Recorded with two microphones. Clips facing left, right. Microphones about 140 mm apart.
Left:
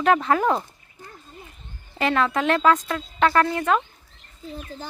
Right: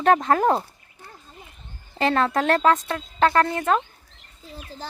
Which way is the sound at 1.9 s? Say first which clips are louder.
Right 1 dB; 35° right (ahead or behind).